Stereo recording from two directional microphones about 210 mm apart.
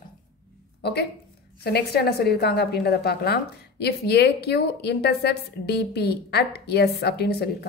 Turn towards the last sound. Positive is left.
turn(degrees=50)  # may be behind; listen again after turning